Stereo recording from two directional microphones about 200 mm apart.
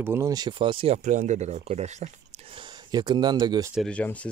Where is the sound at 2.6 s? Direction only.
20° right (ahead or behind).